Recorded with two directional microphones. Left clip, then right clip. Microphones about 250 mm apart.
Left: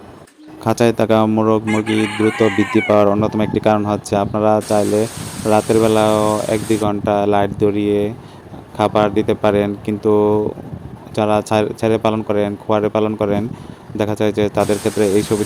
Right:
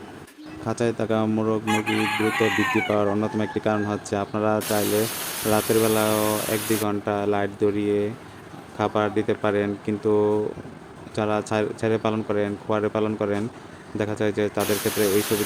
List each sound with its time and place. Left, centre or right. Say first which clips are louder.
0.6 s chicken: left 10 dB; left